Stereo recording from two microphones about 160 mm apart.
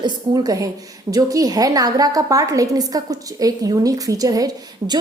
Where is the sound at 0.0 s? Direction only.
25° right (ahead or behind).